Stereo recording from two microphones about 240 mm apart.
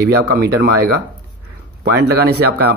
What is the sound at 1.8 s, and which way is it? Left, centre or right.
Speech, right.